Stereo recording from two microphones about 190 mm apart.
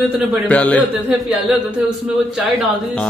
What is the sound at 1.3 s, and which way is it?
Speech, 5° right (ahead or behind).